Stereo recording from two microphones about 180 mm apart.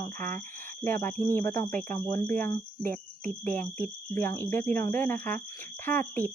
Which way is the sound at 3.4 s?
10° left (ahead or behind).